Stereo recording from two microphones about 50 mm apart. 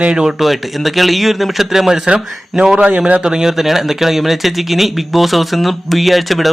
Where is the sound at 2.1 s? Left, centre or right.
Centre.